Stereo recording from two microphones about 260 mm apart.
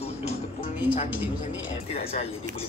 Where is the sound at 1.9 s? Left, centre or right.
Left.